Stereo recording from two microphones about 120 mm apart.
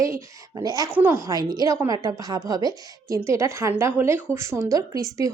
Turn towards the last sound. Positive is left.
turn(degrees=-30)  # may be behind; listen again after turning